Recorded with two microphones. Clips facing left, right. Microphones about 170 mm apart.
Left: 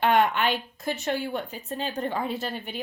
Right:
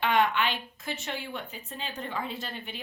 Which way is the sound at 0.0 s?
45° left (ahead or behind).